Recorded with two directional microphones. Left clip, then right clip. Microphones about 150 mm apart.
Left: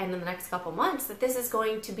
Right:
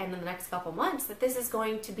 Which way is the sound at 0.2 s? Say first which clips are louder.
Left 2 dB; 5° right (ahead or behind).